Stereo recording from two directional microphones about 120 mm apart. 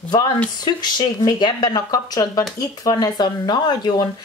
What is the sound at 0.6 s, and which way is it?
Speech, 35° left (ahead or behind).